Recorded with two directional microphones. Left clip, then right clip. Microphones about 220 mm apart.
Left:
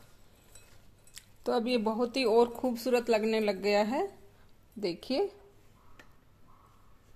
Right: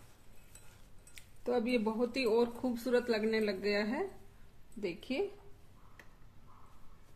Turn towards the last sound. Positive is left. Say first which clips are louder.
# left 5 dB
turn(degrees=35)  # may be behind; listen again after turning